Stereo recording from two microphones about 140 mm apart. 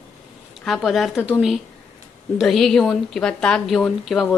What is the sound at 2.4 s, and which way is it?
A woman's voice, centre (ahead or behind).